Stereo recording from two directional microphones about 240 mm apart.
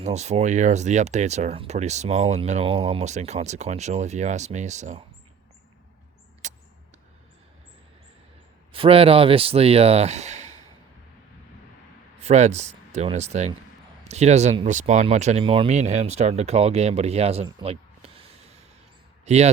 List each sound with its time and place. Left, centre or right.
0.0 s speech: right
6.4 s arrow: right
8.7 s speech: right
12.2 s speech: right
19.2 s speech: right